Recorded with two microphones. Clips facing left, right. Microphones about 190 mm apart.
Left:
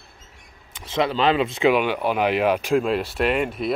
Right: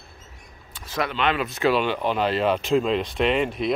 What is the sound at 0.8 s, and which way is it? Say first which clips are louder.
Speech: left 4 dB; 25° left (ahead or behind).